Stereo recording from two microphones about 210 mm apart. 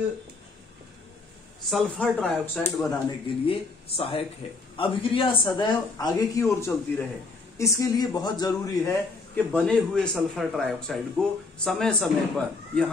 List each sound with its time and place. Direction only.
1.7 s a man's voice: centre (ahead or behind)
3.3 s a man's voice: 25° left (ahead or behind); by 12.9 s 5° left (ahead or behind)